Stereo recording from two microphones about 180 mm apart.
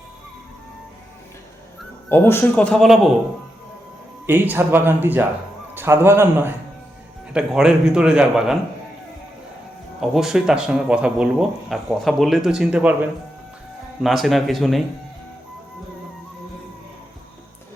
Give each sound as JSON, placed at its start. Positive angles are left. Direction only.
{"t": 2.0, "sound": "speech", "side_deg": 15}
{"t": 4.3, "sound": "speech", "side_deg": -10}
{"t": 10.0, "sound": "speech", "side_deg": 0}